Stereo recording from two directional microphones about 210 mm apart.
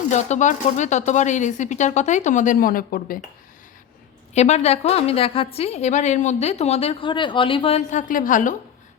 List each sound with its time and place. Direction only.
0.1 s speech: 35° left (ahead or behind)
4.4 s a woman's voice: 30° left (ahead or behind)